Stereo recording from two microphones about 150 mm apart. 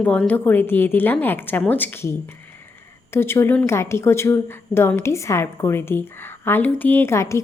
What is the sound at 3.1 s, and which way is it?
A woman's voice, 15° left (ahead or behind).